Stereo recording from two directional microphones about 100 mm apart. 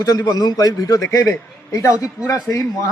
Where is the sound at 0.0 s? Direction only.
40° left (ahead or behind).